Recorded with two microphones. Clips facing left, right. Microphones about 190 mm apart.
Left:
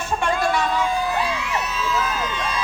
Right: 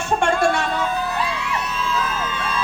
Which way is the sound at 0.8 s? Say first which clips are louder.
Left 1 dB; 10° left (ahead or behind).